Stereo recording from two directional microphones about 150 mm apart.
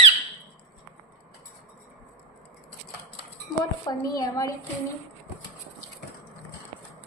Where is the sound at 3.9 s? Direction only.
25° left (ahead or behind).